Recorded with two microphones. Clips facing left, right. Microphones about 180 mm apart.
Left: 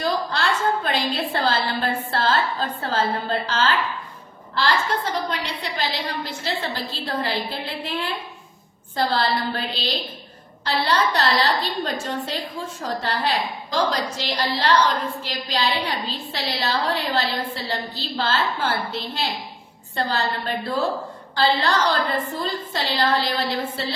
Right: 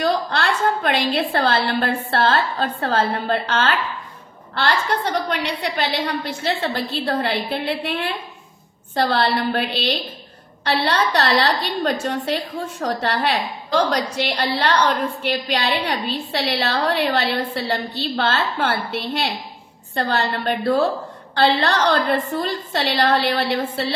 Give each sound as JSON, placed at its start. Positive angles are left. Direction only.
{"t": 0.3, "sound": "a woman's voice", "side_deg": -65}